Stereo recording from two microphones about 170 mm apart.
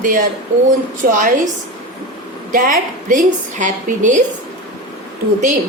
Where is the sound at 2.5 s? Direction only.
50° right (ahead or behind).